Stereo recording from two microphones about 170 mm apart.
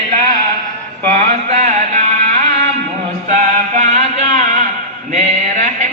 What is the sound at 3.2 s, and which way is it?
Music, 45° right (ahead or behind).